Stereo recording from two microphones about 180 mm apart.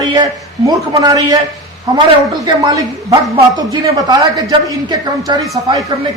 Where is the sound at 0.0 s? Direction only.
20° right (ahead or behind).